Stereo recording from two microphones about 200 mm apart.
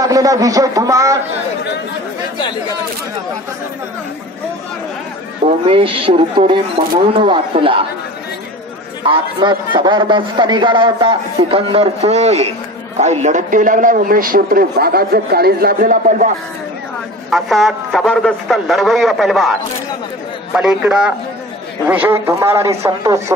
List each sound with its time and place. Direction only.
0.0 s a man's voice: 15° right (ahead or behind)
5.7 s a man's voice: 25° right (ahead or behind)
9.1 s a man's voice: 25° right (ahead or behind); by 16.3 s 40° right (ahead or behind)
17.3 s a man's voice: centre (ahead or behind)
20.5 s a man's voice: 5° right (ahead or behind)